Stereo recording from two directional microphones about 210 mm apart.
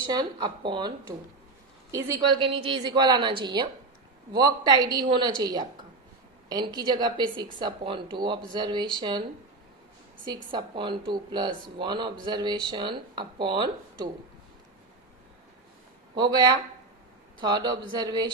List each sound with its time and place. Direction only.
0.0 s a woman's voice: 20° right (ahead or behind)
10.2 s a woman's voice: 20° right (ahead or behind)
16.2 s a woman's voice: 20° right (ahead or behind)